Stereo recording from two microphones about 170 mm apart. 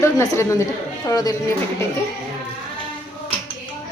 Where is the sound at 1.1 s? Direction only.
20° left (ahead or behind).